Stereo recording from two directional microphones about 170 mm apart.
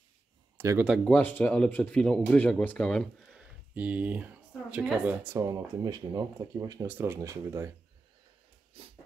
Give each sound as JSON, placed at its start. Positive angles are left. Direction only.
{"t": 0.6, "sound": "speech", "side_deg": -15}
{"t": 0.8, "sound": "speech", "side_deg": 0}
{"t": 3.7, "sound": "speech", "side_deg": -10}
{"t": 5.4, "sound": "speech", "side_deg": -20}
{"t": 8.8, "sound": "dog", "side_deg": -35}